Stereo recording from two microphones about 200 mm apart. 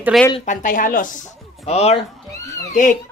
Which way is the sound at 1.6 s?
30° left (ahead or behind).